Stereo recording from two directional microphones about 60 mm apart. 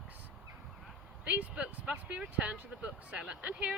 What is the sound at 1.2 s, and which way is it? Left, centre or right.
Speech, right.